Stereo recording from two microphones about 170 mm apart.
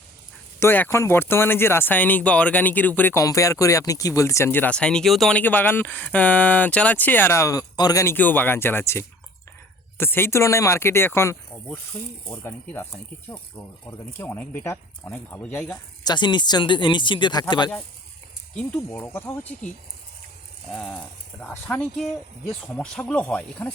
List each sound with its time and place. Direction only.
0.6 s speech: 15° left (ahead or behind)
5.4 s speech: 10° left (ahead or behind)
16.0 s speech: 25° left (ahead or behind)
18.5 s speech: 5° left (ahead or behind)
20.7 s speech: 5° left (ahead or behind)